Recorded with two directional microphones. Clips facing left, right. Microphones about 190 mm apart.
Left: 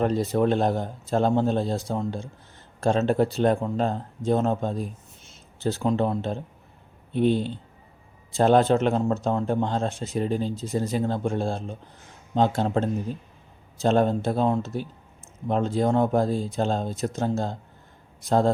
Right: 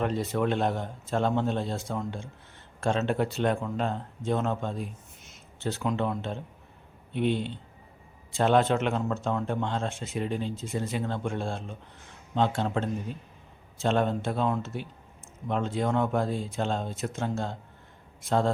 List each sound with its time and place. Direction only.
0.0 s speech: 40° left (ahead or behind)